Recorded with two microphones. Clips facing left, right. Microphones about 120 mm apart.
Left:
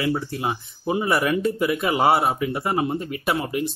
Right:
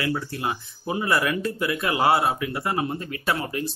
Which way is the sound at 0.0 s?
20° left (ahead or behind).